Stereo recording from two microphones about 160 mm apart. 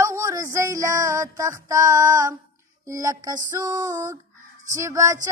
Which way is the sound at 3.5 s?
20° right (ahead or behind).